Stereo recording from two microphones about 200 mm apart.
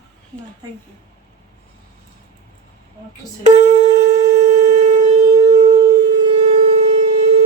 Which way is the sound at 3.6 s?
30° right (ahead or behind).